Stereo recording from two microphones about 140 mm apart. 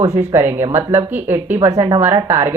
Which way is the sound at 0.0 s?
25° right (ahead or behind).